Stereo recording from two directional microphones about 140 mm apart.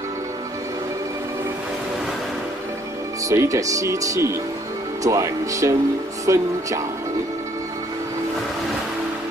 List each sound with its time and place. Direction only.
3.3 s speech: 20° right (ahead or behind)